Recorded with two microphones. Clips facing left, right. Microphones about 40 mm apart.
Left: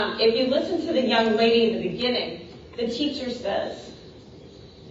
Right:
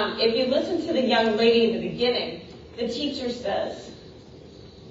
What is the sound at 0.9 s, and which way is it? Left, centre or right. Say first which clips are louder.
Speech: left 1 dB; left.